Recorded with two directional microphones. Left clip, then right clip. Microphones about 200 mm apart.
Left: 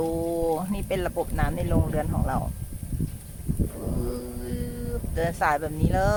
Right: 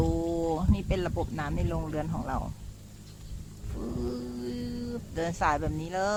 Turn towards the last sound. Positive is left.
turn(degrees=-5)  # may be behind; listen again after turning